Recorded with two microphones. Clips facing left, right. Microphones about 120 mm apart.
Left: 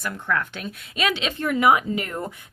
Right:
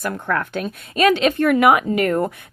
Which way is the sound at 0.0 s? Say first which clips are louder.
Right 4 dB; 50° right (ahead or behind).